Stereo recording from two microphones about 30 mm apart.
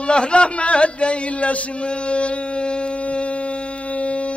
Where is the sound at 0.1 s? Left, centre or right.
Left.